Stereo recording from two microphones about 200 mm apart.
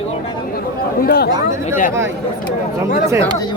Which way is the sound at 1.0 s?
55° left (ahead or behind).